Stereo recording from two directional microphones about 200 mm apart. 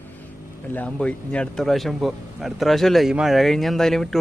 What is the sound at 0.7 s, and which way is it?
Speech, 5° left (ahead or behind).